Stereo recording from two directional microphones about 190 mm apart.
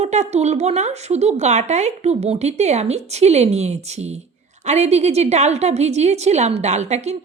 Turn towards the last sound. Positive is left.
turn(degrees=-35)  # may be behind; listen again after turning